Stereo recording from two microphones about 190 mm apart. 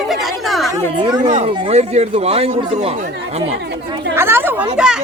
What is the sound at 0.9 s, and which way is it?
Speech, 25° right (ahead or behind).